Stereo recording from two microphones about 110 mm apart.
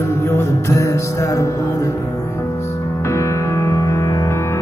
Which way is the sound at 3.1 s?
25° left (ahead or behind).